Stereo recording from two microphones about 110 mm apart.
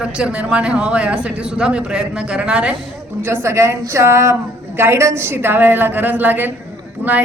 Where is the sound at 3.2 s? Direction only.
20° right (ahead or behind).